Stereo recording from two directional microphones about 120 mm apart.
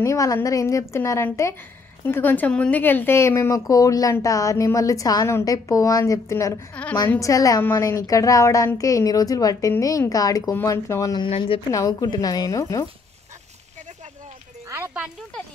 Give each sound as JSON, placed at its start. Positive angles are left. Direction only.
{"t": 0.0, "sound": "a woman's voice", "side_deg": 25}
{"t": 6.7, "sound": "a woman's voice", "side_deg": 10}
{"t": 7.2, "sound": "a woman's voice", "side_deg": 30}
{"t": 11.2, "sound": "a woman's voice", "side_deg": 50}
{"t": 11.7, "sound": "a woman's voice", "side_deg": 30}